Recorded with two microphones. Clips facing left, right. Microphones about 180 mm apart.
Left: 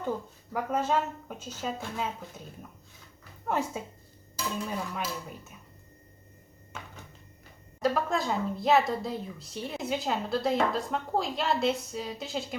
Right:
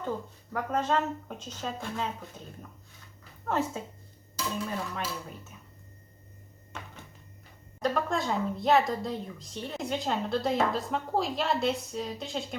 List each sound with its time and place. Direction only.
0.5 s speech: 10° left (ahead or behind)
3.4 s speech: 10° left (ahead or behind)
7.8 s speech: centre (ahead or behind)